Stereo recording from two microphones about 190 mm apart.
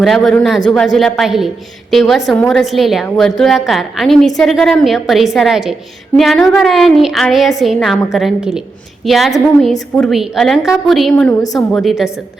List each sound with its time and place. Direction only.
0.0 s a woman's voice: centre (ahead or behind)